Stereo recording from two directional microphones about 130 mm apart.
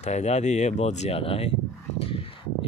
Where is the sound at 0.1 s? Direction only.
60° left (ahead or behind).